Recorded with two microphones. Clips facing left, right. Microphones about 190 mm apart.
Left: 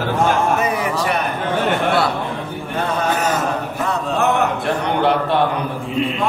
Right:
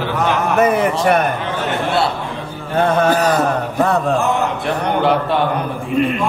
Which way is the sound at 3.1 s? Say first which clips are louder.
Right 4 dB; 35° right (ahead or behind).